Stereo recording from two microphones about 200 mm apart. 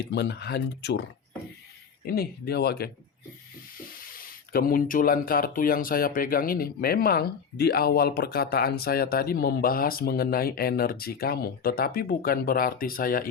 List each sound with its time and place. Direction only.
0.0 s speech: 60° left (ahead or behind)
2.0 s speech: 50° left (ahead or behind)
4.0 s speech: 45° left (ahead or behind)